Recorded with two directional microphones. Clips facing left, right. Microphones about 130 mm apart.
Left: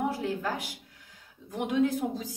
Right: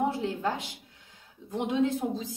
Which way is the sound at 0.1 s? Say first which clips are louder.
Right 1 dB; 25° right (ahead or behind).